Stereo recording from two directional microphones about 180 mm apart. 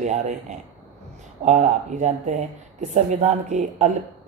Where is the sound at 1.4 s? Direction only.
40° right (ahead or behind).